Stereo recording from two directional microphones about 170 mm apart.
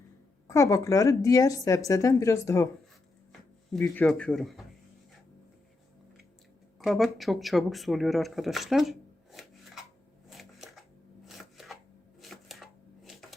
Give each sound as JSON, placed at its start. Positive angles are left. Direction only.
{"t": 0.4, "sound": "a woman's voice", "side_deg": 20}
{"t": 3.7, "sound": "speech", "side_deg": 5}
{"t": 6.7, "sound": "speech", "side_deg": 0}
{"t": 10.2, "sound": "shuffling cards", "side_deg": 0}
{"t": 11.3, "sound": "chopping", "side_deg": 0}
{"t": 12.2, "sound": "a sound", "side_deg": 0}